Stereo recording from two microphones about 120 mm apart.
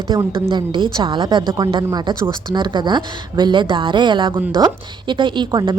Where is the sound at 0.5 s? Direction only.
45° right (ahead or behind).